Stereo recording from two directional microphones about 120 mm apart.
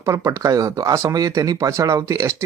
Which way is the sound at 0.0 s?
25° right (ahead or behind).